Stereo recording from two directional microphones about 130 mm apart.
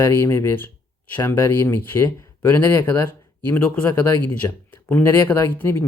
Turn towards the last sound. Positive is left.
turn(degrees=20)  # may be behind; listen again after turning